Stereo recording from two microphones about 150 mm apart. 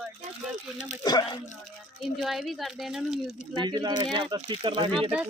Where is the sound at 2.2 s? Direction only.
Centre (ahead or behind).